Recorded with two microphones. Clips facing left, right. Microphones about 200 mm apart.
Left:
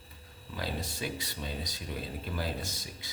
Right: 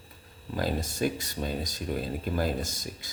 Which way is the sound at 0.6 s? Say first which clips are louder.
Right 8 dB; 45° right (ahead or behind).